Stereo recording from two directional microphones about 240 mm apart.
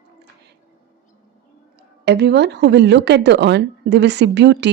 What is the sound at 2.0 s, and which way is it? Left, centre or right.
Speech, right.